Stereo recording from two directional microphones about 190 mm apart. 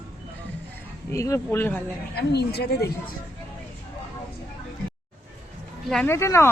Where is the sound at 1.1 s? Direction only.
15° left (ahead or behind).